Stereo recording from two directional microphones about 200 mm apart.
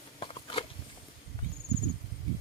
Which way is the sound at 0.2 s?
25° left (ahead or behind).